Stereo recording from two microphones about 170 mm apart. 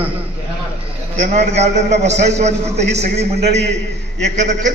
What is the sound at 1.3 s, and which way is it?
A man's voice, 40° right (ahead or behind).